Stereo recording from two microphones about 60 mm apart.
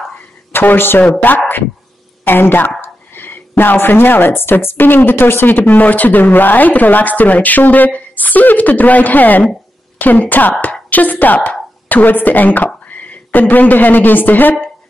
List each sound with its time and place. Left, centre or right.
0.5 s a woman's voice: left